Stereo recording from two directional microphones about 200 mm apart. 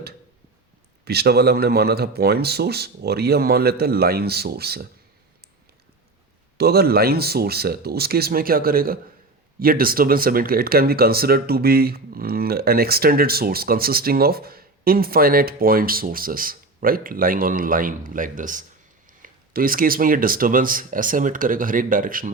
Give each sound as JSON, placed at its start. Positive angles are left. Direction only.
{"t": 1.0, "sound": "speech", "side_deg": -55}
{"t": 6.6, "sound": "speech", "side_deg": -50}